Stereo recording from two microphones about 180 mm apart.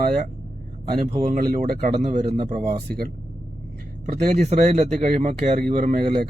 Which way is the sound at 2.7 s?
55° right (ahead or behind).